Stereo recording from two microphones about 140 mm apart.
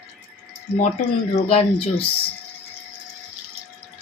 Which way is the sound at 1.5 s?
40° left (ahead or behind).